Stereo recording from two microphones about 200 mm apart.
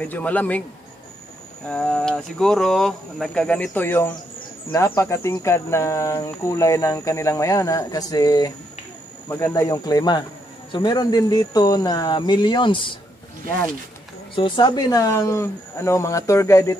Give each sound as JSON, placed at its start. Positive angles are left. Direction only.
{"t": 0.0, "sound": "speech", "side_deg": 10}
{"t": 1.7, "sound": "speech", "side_deg": 5}
{"t": 14.3, "sound": "speech", "side_deg": 25}